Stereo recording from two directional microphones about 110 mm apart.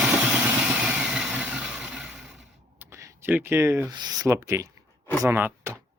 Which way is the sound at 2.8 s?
20° right (ahead or behind).